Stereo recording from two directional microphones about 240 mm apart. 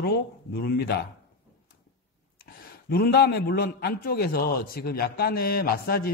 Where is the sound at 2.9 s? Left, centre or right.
Left.